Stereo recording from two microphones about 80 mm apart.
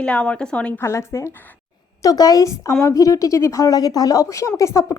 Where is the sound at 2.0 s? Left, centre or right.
Left.